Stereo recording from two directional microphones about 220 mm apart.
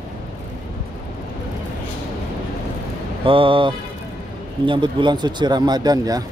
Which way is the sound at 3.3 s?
25° right (ahead or behind).